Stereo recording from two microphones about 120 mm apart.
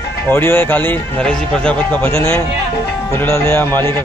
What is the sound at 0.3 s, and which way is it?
A man's voice, 15° left (ahead or behind).